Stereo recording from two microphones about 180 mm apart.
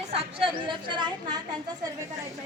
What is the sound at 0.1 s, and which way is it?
Chatter, 30° right (ahead or behind).